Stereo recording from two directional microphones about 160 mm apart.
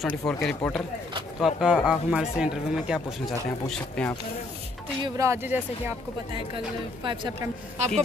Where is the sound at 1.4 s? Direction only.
5° right (ahead or behind).